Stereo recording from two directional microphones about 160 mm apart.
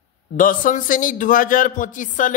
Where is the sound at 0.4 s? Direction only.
55° left (ahead or behind).